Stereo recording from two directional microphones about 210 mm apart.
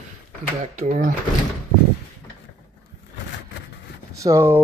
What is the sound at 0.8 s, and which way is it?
Speech, 40° right (ahead or behind).